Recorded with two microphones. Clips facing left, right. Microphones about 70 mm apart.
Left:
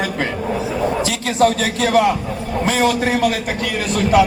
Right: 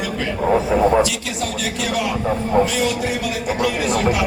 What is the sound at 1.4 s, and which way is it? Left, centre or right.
A man's voice, left.